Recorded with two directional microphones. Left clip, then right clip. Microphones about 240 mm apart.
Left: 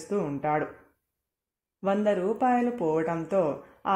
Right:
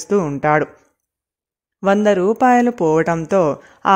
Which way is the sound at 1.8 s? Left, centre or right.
Right.